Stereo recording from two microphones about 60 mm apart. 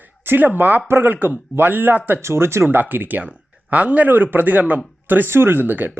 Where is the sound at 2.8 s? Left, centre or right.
Right.